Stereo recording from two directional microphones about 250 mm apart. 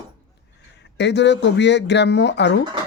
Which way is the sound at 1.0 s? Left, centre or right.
Left.